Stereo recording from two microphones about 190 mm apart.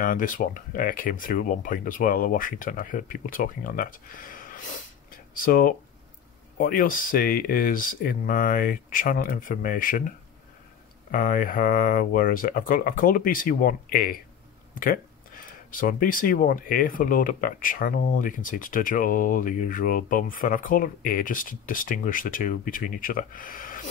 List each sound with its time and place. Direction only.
0.0 s speech: 45° left (ahead or behind)
5.1 s a sound: 45° left (ahead or behind)
6.6 s speech: 45° left (ahead or behind)